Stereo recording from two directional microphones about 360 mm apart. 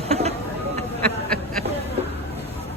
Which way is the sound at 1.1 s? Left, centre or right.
Centre.